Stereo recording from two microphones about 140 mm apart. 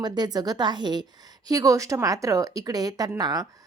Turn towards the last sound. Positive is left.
turn(degrees=-30)  # may be behind; listen again after turning